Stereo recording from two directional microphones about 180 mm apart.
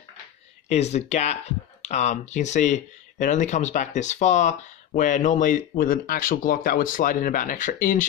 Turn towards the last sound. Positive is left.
turn(degrees=45)  # may be behind; listen again after turning